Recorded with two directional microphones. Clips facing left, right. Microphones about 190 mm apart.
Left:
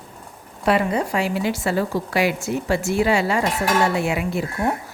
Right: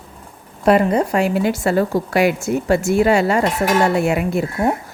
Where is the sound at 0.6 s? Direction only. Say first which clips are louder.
Right 5 dB; 45° right (ahead or behind).